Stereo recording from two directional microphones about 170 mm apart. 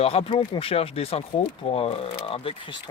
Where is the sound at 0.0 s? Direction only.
35° left (ahead or behind).